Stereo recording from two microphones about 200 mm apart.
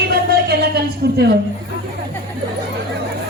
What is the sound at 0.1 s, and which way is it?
Music, 50° right (ahead or behind).